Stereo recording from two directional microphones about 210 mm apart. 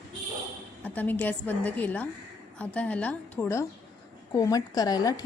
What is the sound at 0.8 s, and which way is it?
Speech, 10° left (ahead or behind).